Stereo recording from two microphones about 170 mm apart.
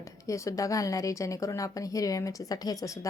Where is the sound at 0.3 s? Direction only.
20° left (ahead or behind).